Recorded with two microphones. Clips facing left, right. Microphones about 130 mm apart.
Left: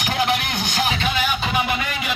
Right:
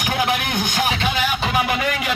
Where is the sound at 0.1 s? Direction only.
50° right (ahead or behind).